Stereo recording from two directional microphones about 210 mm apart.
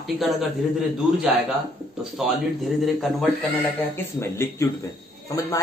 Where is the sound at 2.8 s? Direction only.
Centre (ahead or behind).